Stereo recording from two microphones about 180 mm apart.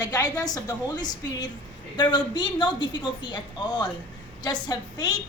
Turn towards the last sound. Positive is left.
turn(degrees=20)  # may be behind; listen again after turning